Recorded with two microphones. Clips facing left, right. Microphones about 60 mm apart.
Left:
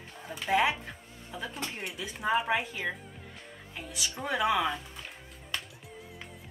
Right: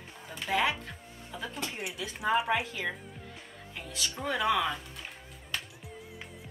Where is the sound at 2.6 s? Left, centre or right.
Centre.